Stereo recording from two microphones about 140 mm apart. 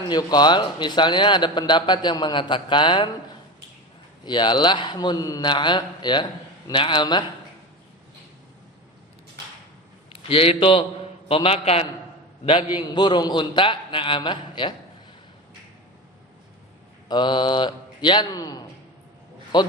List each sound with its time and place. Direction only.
0.1 s a man's voice: 30° left (ahead or behind)
4.3 s a man's voice: 35° left (ahead or behind)
10.1 s a man's voice: 40° left (ahead or behind)
12.8 s a man's voice: 35° left (ahead or behind)
17.1 s a man's voice: 35° left (ahead or behind)